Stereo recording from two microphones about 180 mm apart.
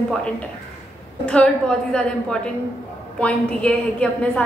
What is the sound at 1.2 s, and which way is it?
Speech, 5° left (ahead or behind).